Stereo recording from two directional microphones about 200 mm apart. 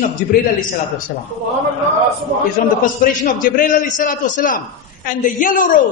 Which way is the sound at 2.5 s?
40° left (ahead or behind).